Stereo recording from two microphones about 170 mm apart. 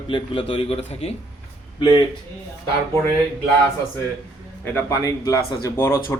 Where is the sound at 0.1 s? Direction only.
30° left (ahead or behind).